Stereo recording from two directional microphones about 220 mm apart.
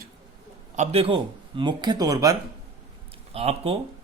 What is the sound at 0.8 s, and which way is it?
Speech, 25° right (ahead or behind).